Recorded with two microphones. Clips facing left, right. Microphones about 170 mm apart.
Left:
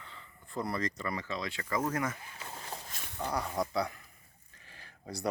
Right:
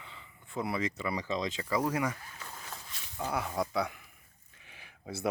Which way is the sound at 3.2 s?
5° right (ahead or behind).